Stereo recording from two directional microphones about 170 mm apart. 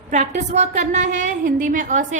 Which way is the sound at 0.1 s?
45° right (ahead or behind).